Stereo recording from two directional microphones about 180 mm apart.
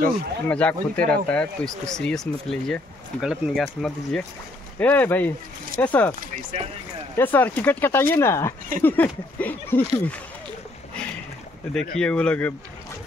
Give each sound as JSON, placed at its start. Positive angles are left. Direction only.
{"t": 0.5, "sound": "speech", "side_deg": 5}
{"t": 6.3, "sound": "speech", "side_deg": -35}
{"t": 7.2, "sound": "speech", "side_deg": 10}
{"t": 11.7, "sound": "speech", "side_deg": 5}